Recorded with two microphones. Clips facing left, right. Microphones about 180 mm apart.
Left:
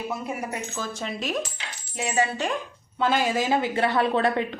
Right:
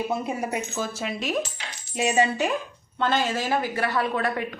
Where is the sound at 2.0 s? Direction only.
20° right (ahead or behind).